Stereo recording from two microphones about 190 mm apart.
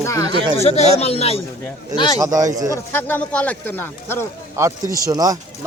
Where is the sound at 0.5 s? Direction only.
35° left (ahead or behind).